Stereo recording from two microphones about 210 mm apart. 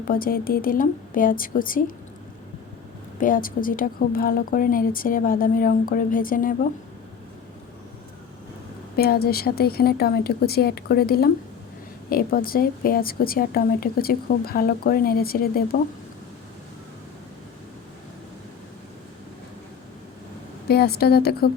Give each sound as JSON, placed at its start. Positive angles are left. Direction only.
{"t": 0.1, "sound": "speech", "side_deg": 45}
{"t": 3.2, "sound": "speech", "side_deg": 40}
{"t": 9.0, "sound": "a woman's voice", "side_deg": 45}
{"t": 20.7, "sound": "a woman's voice", "side_deg": 50}